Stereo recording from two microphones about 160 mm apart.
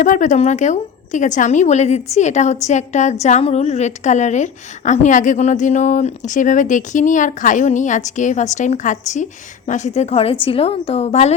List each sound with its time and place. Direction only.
0.0 s a woman's voice: 50° left (ahead or behind)